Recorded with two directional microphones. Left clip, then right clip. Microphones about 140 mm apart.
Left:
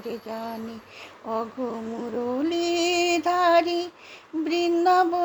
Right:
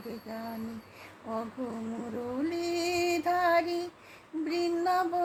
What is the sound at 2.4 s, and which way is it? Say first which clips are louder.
Speech: left 6 dB; 40° left (ahead or behind).